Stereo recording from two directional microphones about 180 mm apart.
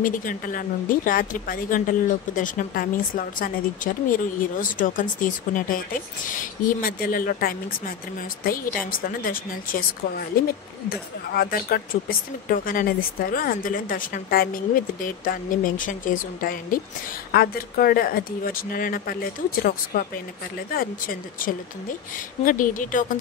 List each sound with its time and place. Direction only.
0.0 s speech: 50° left (ahead or behind)
8.9 s speech: 50° left (ahead or behind)